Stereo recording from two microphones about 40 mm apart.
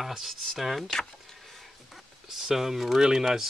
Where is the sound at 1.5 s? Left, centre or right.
Centre.